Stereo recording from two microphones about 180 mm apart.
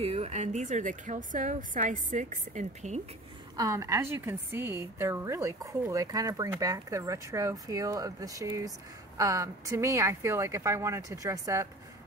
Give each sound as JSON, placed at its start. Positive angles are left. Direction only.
{"t": 0.0, "sound": "a woman's voice", "side_deg": -35}
{"t": 3.5, "sound": "a woman's voice", "side_deg": -20}